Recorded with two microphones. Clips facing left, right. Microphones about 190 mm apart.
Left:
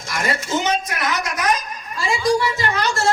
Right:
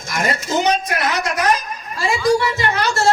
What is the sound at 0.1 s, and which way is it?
Speech, 40° right (ahead or behind).